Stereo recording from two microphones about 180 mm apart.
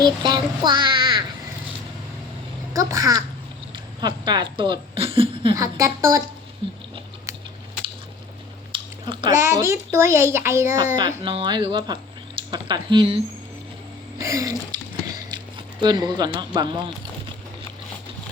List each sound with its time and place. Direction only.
0.0 s a child's voice: 25° right (ahead or behind)
2.7 s a woman's voice: 20° right (ahead or behind)
8.7 s squish: 30° right (ahead or behind)
9.3 s a woman's voice: 15° right (ahead or behind)
14.2 s speech: 15° right (ahead or behind)
15.8 s a woman's voice: 20° right (ahead or behind)